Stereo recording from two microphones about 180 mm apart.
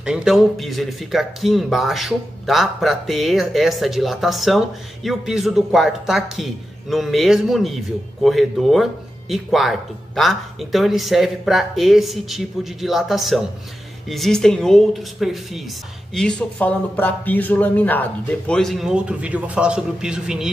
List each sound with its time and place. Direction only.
0.0 s speech: 5° right (ahead or behind)